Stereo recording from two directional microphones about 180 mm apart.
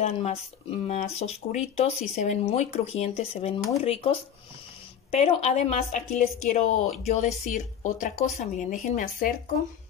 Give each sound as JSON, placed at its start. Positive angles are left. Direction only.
{"t": 0.0, "sound": "speech", "side_deg": 35}